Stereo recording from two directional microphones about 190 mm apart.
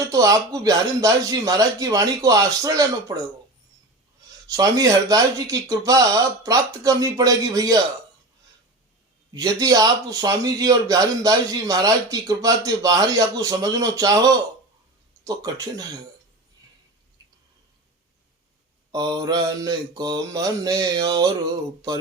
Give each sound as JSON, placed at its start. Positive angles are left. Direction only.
{"t": 0.0, "sound": "a man's voice", "side_deg": -20}
{"t": 4.5, "sound": "a man's voice", "side_deg": -20}
{"t": 9.3, "sound": "a man's voice", "side_deg": -20}
{"t": 18.9, "sound": "a man's voice", "side_deg": -20}